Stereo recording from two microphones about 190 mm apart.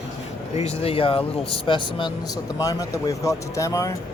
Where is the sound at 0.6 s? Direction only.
30° left (ahead or behind).